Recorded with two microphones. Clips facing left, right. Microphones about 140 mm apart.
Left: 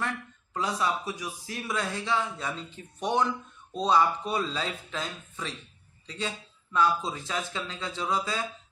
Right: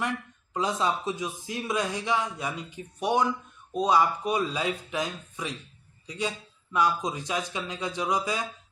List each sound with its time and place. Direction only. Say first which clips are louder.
0.0 s speech: right 2 dB; 20° right (ahead or behind)